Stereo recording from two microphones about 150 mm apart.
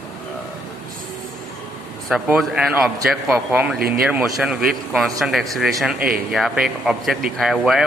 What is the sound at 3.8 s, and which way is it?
Speech, 90° right.